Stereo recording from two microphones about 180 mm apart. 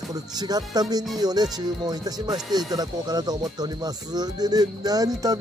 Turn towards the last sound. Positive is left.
turn(degrees=-20)  # may be behind; listen again after turning